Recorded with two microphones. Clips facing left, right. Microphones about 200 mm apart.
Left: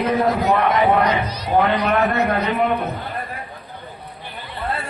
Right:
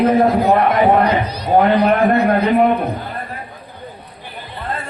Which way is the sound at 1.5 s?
40° right (ahead or behind).